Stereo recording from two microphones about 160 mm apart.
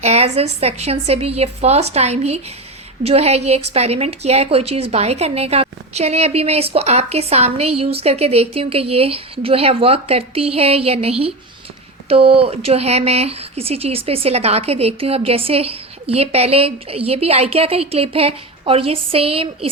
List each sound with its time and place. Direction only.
0.0 s speech: 40° right (ahead or behind)